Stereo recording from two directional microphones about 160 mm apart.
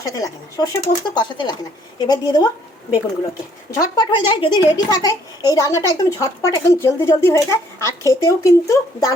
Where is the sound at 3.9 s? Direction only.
30° left (ahead or behind).